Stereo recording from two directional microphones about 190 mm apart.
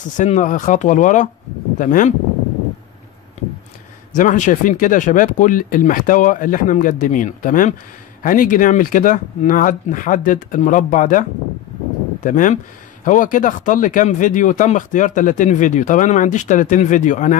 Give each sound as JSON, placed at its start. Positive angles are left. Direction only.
{"t": 0.2, "sound": "speech", "side_deg": 40}
{"t": 4.1, "sound": "speech", "side_deg": 40}